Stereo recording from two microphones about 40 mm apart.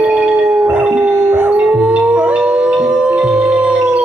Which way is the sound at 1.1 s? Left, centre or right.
Right.